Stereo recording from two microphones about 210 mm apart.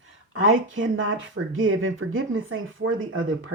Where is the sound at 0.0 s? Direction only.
70° right (ahead or behind).